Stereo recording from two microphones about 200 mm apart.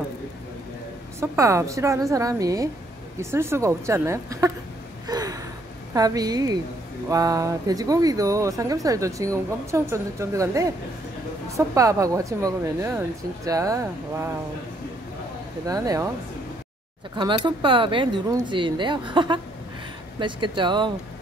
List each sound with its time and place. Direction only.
1.3 s speech: 15° right (ahead or behind)
5.0 s gasp: 20° right (ahead or behind)
5.9 s speech: 20° right (ahead or behind)
15.6 s speech: 20° right (ahead or behind)
17.1 s speech: 20° right (ahead or behind)